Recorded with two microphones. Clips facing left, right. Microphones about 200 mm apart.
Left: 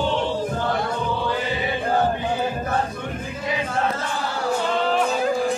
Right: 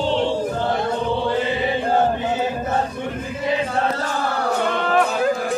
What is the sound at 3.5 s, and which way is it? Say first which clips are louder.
Chant: right 3 dB; 35° right (ahead or behind).